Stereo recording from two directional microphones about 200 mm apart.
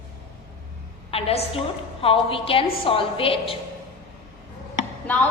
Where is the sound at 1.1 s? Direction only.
30° left (ahead or behind).